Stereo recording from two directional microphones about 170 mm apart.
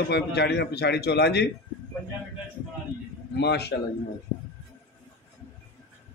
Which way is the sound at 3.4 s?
75° left (ahead or behind).